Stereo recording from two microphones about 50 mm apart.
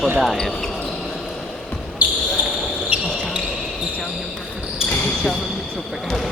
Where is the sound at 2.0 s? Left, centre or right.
Right.